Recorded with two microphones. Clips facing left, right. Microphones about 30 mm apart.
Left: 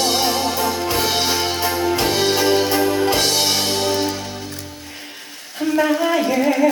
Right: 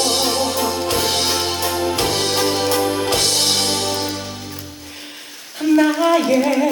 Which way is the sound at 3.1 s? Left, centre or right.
Left.